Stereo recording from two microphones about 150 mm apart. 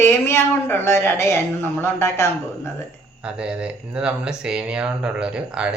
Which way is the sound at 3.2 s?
5° right (ahead or behind).